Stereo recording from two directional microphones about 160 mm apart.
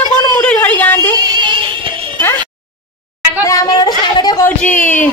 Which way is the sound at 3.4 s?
25° left (ahead or behind).